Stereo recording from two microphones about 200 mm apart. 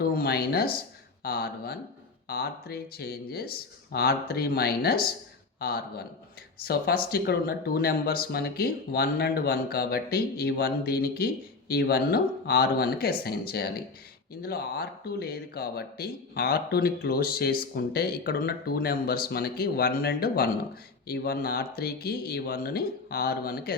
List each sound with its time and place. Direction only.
0.0 s a man's voice: 50° left (ahead or behind)